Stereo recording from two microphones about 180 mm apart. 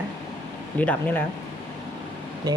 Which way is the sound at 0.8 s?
10° left (ahead or behind).